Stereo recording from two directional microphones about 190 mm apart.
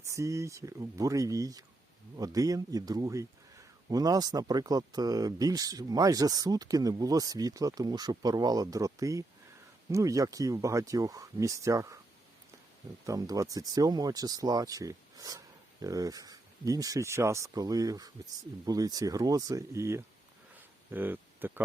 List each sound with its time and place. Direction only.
0.1 s speech: 15° right (ahead or behind)
13.1 s speech: 20° right (ahead or behind)